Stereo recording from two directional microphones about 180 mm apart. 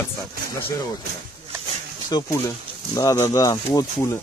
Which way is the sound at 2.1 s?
20° left (ahead or behind).